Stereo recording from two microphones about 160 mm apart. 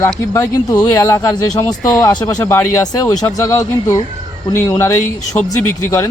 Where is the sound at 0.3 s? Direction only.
15° left (ahead or behind).